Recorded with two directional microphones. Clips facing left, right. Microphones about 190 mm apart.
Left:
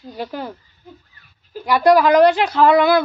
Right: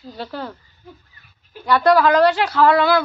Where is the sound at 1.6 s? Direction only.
15° left (ahead or behind).